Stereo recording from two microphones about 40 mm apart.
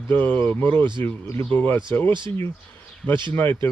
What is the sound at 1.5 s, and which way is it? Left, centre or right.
Speech, left.